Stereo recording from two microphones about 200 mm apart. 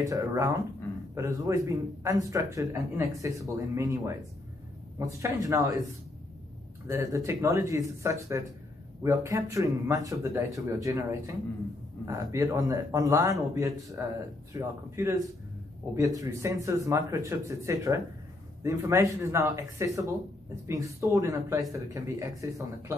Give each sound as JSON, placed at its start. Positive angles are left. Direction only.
{"t": 0.0, "sound": "speech", "side_deg": -15}
{"t": 6.9, "sound": "speech", "side_deg": -15}